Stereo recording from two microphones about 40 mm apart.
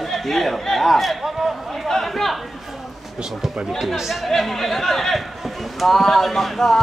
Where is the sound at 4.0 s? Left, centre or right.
Centre.